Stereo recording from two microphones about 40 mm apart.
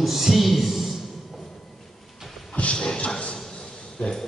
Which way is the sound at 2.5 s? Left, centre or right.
Left.